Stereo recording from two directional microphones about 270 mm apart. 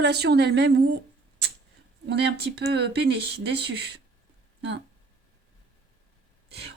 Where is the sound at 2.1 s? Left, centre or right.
Right.